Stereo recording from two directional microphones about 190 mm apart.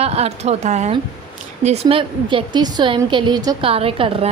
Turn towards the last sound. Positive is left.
turn(degrees=-30)  # may be behind; listen again after turning